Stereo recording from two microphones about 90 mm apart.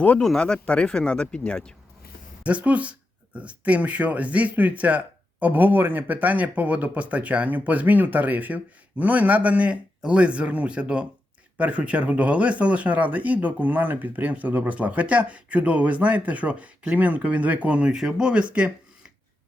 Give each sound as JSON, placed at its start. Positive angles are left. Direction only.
{"t": 0.2, "sound": "speech", "side_deg": 5}
{"t": 2.4, "sound": "speech", "side_deg": -15}